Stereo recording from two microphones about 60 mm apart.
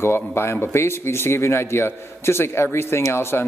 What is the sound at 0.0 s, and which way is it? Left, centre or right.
Speech, left.